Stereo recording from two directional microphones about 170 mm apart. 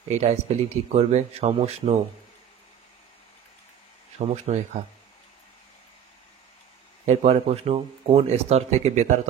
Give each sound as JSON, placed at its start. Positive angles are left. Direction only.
{"t": 0.1, "sound": "speech", "side_deg": -40}
{"t": 4.2, "sound": "speech", "side_deg": -40}
{"t": 7.1, "sound": "speech", "side_deg": -35}